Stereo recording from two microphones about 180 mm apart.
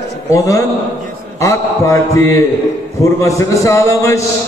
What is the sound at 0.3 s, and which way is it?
Speech, 20° left (ahead or behind).